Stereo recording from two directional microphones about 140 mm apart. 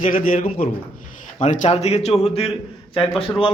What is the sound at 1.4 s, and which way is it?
Speech, 55° left (ahead or behind).